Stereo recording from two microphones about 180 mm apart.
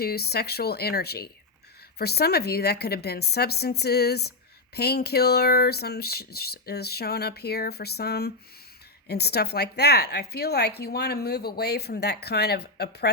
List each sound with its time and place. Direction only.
0.0 s a woman's voice: 60° left (ahead or behind)